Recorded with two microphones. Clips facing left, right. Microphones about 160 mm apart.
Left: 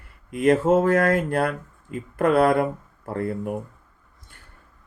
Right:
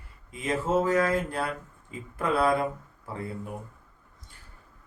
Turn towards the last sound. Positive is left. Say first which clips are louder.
# left 9 dB
turn(degrees=60)  # may be behind; listen again after turning